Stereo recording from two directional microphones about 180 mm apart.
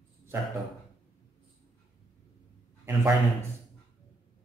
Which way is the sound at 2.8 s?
15° right (ahead or behind).